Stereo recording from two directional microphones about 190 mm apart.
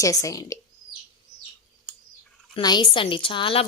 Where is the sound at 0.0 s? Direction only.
15° left (ahead or behind).